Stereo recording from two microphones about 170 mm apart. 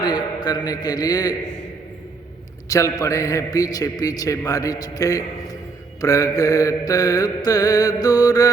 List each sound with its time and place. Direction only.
0.0 s a man's voice: 25° left (ahead or behind)
2.6 s a man's voice: 20° left (ahead or behind)